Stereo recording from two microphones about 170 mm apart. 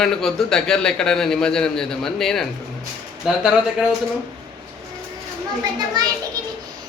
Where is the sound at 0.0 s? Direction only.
5° left (ahead or behind).